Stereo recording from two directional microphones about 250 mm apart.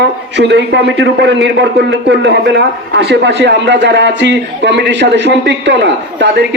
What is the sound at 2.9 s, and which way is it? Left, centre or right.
A man's voice, right.